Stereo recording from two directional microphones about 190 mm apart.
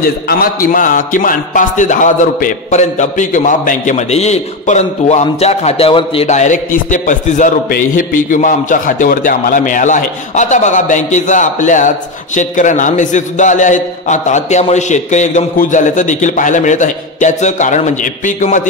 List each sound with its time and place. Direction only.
0.0 s speech: 50° left (ahead or behind)